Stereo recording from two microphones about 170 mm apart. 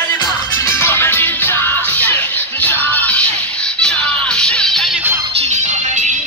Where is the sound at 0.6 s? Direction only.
15° left (ahead or behind).